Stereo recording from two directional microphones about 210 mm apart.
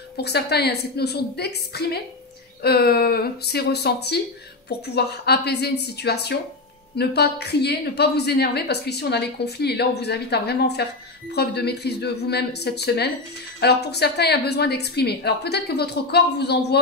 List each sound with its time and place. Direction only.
0.2 s a woman's voice: 50° left (ahead or behind)